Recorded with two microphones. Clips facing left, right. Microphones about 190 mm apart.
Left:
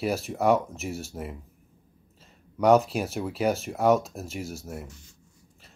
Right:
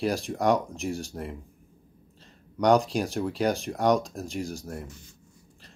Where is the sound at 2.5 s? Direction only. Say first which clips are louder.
Left 1 dB; 5° left (ahead or behind).